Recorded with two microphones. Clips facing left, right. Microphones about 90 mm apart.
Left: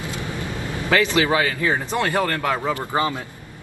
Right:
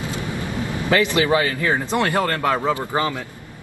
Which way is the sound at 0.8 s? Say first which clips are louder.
Even; 20° right (ahead or behind).